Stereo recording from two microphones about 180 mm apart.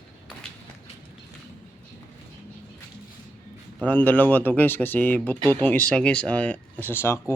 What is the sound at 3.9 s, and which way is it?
Speech, 10° left (ahead or behind).